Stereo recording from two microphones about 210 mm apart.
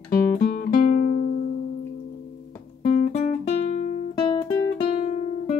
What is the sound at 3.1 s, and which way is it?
Guitar, 30° left (ahead or behind).